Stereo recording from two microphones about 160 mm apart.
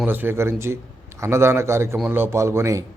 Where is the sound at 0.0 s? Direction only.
10° right (ahead or behind).